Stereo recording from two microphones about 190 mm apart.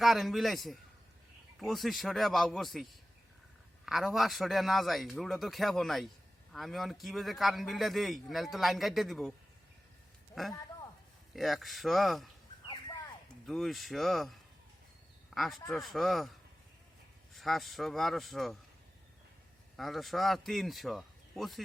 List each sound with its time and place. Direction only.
0.0 s a man's voice: centre (ahead or behind)
10.4 s a man's voice: centre (ahead or behind)
12.6 s horse: 25° left (ahead or behind)
13.4 s a man's voice: centre (ahead or behind)
15.4 s a man's voice: centre (ahead or behind)
17.3 s a man's voice: centre (ahead or behind)
19.7 s a man's voice: centre (ahead or behind)